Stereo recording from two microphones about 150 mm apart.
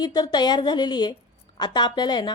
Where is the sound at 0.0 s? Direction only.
25° left (ahead or behind).